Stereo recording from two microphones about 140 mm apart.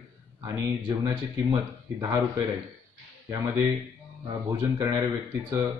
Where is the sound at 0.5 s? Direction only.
25° right (ahead or behind).